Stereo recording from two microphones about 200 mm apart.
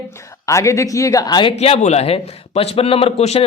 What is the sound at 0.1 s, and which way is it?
Speech, 15° left (ahead or behind).